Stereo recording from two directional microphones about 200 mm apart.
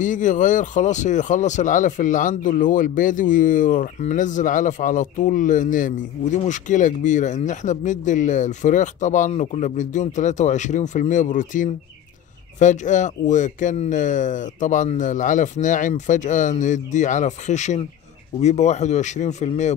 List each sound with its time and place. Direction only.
0.0 s speech: 40° left (ahead or behind)